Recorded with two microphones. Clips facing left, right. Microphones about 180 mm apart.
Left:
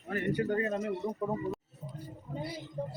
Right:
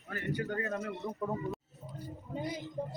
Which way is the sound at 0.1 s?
25° left (ahead or behind).